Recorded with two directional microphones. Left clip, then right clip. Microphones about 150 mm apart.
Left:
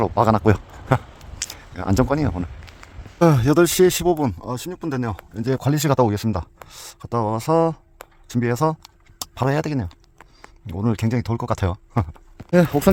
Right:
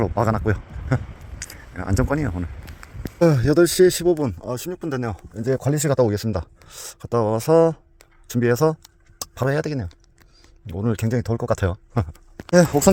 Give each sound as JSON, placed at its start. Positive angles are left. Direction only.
{"t": 0.0, "sound": "a sound", "side_deg": 25}
{"t": 1.5, "sound": "speech", "side_deg": 20}
{"t": 2.7, "sound": "a sound", "side_deg": -90}
{"t": 3.2, "sound": "speech", "side_deg": 15}
{"t": 4.4, "sound": "speech", "side_deg": -5}
{"t": 5.3, "sound": "speech", "side_deg": 10}
{"t": 6.7, "sound": "speech", "side_deg": -10}
{"t": 9.1, "sound": "speech", "side_deg": 5}